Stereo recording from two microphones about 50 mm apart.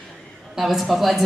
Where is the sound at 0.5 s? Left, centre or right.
Centre.